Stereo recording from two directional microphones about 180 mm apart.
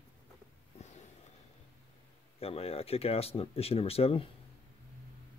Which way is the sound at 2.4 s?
35° left (ahead or behind).